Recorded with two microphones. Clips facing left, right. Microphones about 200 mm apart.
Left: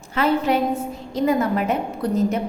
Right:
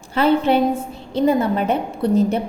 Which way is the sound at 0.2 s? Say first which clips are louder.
Right 4 dB; 30° right (ahead or behind).